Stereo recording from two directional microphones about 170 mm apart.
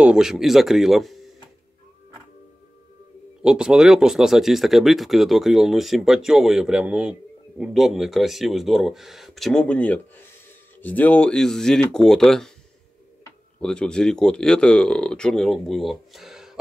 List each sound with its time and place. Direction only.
0.0 s speech: 5° right (ahead or behind)
3.4 s speech: 5° right (ahead or behind)
13.6 s speech: 5° left (ahead or behind)